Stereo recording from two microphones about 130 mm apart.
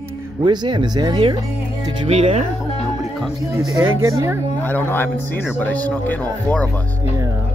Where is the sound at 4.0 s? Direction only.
20° right (ahead or behind).